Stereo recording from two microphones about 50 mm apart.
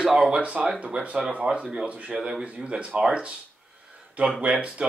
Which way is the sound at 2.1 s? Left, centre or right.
Centre.